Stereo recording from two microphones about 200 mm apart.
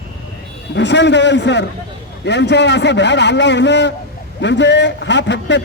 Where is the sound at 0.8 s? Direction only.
60° left (ahead or behind).